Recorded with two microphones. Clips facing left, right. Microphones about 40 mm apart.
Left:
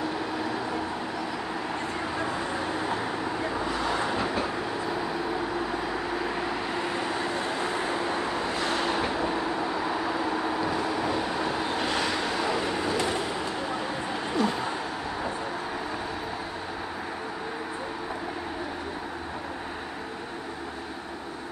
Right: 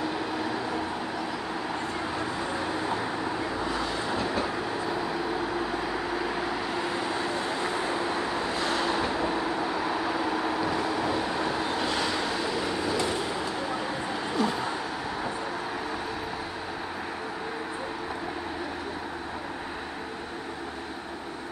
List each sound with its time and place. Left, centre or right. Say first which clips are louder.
2.1 s vehicle: left 1 dB; centre
3.8 s train: left 3 dB; left
4.3 s train: even; centre
5.7 s vehicle: even; centre
6.3 s vehicle: even; centre
8.0 s vehicle: even; centre
9.0 s vehicle: even; centre
11.7 s vehicle: even; left
14.4 s a sound: even; centre